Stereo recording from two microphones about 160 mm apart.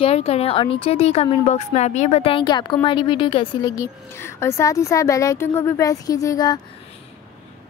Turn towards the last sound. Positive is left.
turn(degrees=25)  # may be behind; listen again after turning